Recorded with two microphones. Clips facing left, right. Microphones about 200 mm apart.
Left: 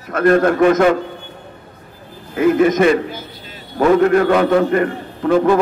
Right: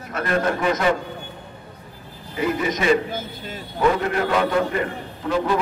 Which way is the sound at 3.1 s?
50° right (ahead or behind).